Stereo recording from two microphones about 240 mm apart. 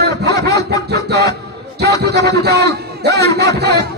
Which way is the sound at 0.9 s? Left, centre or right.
Right.